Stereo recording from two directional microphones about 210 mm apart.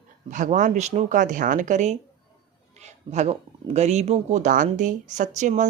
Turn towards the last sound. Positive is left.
turn(degrees=-35)  # may be behind; listen again after turning